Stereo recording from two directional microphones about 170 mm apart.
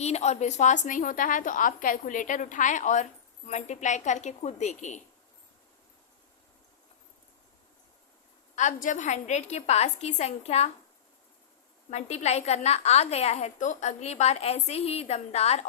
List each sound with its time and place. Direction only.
0.0 s a woman's voice: 40° left (ahead or behind)
8.5 s a woman's voice: 45° left (ahead or behind)
11.9 s a woman's voice: 40° left (ahead or behind)